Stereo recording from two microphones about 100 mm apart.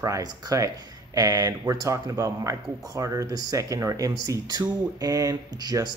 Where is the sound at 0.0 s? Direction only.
35° right (ahead or behind).